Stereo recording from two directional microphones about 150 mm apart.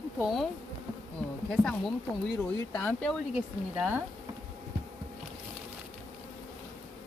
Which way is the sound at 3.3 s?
10° right (ahead or behind).